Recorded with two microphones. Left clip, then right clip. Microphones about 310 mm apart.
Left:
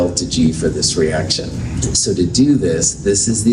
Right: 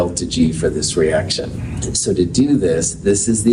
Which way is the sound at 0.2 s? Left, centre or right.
Right.